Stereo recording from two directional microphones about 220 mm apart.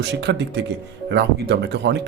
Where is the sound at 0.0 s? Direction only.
50° right (ahead or behind).